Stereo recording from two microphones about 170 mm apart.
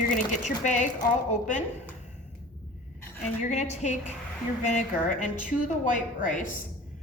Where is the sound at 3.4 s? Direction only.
45° left (ahead or behind).